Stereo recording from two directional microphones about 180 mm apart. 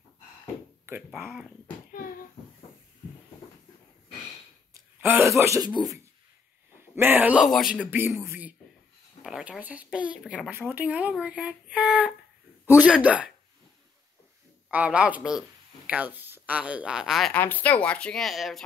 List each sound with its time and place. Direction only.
0.8 s speech: 10° right (ahead or behind)
5.0 s a man's voice: 10° right (ahead or behind)
14.7 s a woman's voice: 5° right (ahead or behind)